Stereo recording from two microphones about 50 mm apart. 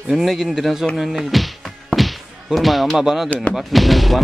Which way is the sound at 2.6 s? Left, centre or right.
Centre.